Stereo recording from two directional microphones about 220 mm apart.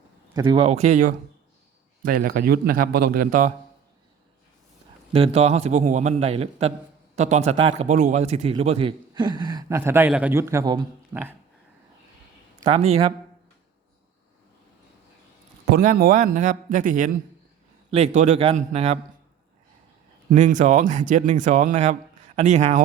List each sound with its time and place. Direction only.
0.3 s a man's voice: 20° right (ahead or behind); by 3.5 s 40° right (ahead or behind)
5.1 s a man's voice: 25° right (ahead or behind); by 11.3 s 10° right (ahead or behind)
12.6 s a man's voice: 25° right (ahead or behind)
15.7 s a man's voice: 40° right (ahead or behind)
20.3 s speech: 35° right (ahead or behind)